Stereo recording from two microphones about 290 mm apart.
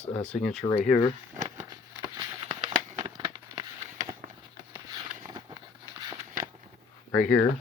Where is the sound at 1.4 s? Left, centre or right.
Centre.